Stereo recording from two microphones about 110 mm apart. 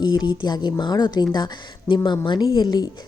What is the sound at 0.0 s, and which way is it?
A woman's voice, 40° left (ahead or behind).